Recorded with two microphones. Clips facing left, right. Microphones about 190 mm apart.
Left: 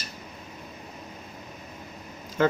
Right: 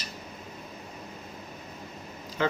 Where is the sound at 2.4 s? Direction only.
50° left (ahead or behind).